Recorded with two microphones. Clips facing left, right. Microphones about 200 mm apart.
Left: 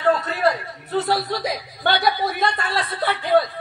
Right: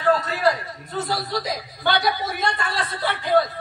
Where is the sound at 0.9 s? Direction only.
60° left (ahead or behind).